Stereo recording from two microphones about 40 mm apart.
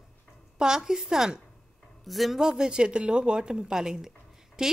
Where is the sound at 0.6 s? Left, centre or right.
Centre.